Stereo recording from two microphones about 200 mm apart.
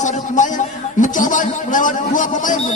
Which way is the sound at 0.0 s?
40° left (ahead or behind).